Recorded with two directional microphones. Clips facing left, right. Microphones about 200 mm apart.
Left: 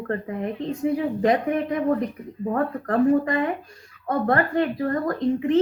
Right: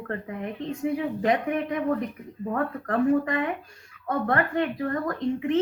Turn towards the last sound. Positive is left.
turn(degrees=35)  # may be behind; listen again after turning